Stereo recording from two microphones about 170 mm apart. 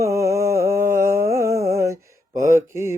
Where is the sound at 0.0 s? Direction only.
20° right (ahead or behind).